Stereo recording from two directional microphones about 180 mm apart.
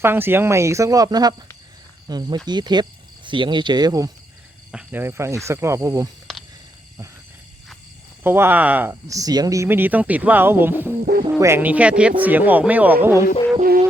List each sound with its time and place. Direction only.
0.0 s speech: 10° right (ahead or behind)
4.7 s speech: 5° right (ahead or behind)
6.3 s a sound: centre (ahead or behind)
8.2 s speech: 10° right (ahead or behind)
11.0 s speech: 55° right (ahead or behind)
11.3 s speech: 15° right (ahead or behind)
13.6 s music: 45° right (ahead or behind)